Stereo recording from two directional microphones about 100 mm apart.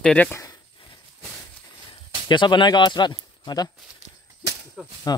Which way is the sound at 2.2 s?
50° left (ahead or behind).